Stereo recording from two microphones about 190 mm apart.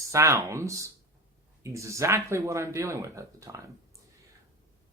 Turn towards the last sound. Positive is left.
turn(degrees=-15)  # may be behind; listen again after turning